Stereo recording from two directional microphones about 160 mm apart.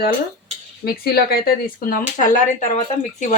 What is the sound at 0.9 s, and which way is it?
Speech, 70° left (ahead or behind).